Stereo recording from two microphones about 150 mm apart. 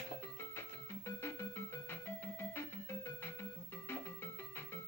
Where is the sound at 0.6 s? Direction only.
15° left (ahead or behind).